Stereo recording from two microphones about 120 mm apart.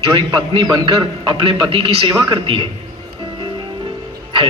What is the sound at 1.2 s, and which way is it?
A man's voice, 45° right (ahead or behind).